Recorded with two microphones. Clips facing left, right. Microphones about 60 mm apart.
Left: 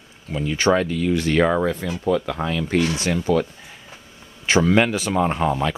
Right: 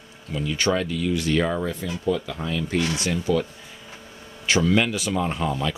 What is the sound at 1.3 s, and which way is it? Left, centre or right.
Speech, left.